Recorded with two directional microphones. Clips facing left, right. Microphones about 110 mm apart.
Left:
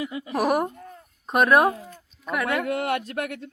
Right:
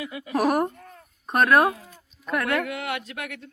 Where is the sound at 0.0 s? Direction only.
30° left (ahead or behind).